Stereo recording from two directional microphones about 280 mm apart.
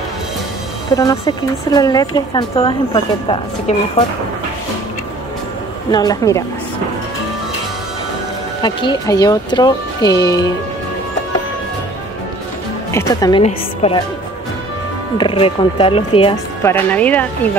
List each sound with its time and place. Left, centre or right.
0.9 s a woman's voice: centre
5.9 s a woman's voice: centre
8.6 s a woman's voice: centre
12.9 s a woman's voice: centre
15.1 s speech: centre
16.7 s speech: centre